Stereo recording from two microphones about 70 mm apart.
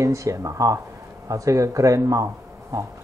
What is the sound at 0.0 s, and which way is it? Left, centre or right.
Speech, right.